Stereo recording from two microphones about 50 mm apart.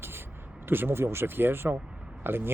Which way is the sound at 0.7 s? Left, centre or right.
Right.